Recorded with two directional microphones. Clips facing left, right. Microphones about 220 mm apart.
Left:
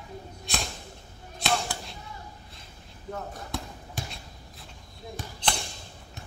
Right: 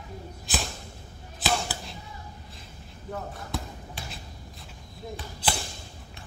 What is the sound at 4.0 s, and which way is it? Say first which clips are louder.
Shuffle: left 5 dB; 45° left (ahead or behind).